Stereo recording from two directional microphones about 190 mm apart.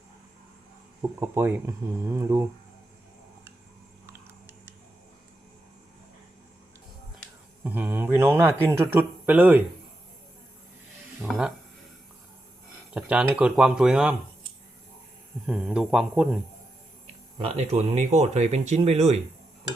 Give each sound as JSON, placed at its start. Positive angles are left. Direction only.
{"t": 1.0, "sound": "speech", "side_deg": -15}
{"t": 7.6, "sound": "speech", "side_deg": -10}
{"t": 11.2, "sound": "speech", "side_deg": -5}
{"t": 12.9, "sound": "speech", "side_deg": -5}
{"t": 15.4, "sound": "speech", "side_deg": -5}
{"t": 17.3, "sound": "speech", "side_deg": -30}